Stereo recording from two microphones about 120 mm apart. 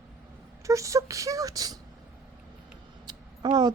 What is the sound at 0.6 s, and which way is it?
A woman's voice, 25° right (ahead or behind).